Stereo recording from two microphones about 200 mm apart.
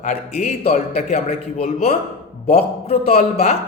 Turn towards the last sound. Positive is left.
turn(degrees=30)  # may be behind; listen again after turning